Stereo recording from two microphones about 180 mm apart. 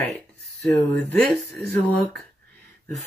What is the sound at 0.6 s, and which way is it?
Speech, 15° left (ahead or behind).